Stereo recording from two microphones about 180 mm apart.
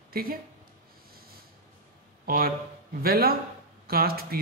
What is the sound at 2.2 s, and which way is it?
A woman's voice, 55° right (ahead or behind).